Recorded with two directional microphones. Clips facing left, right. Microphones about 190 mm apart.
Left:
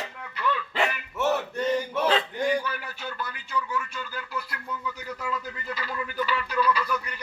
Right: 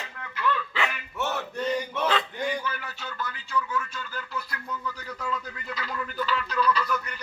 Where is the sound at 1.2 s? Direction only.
10° left (ahead or behind).